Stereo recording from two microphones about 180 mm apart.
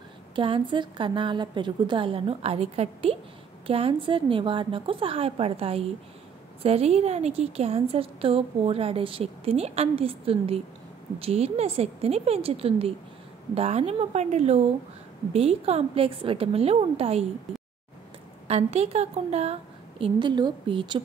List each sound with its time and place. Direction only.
0.4 s a woman's voice: 30° right (ahead or behind)
18.5 s a woman's voice: 35° right (ahead or behind)